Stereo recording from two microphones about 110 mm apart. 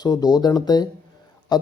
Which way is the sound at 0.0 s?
35° left (ahead or behind).